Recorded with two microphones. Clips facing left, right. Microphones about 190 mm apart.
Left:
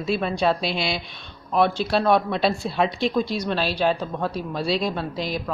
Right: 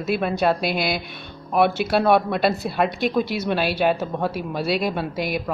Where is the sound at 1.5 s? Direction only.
5° right (ahead or behind).